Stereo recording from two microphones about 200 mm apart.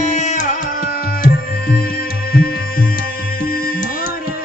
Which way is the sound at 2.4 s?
50° left (ahead or behind).